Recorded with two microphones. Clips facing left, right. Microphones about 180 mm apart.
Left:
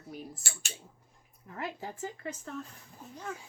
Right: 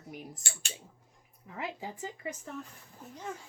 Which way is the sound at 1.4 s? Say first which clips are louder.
Even; 10° right (ahead or behind).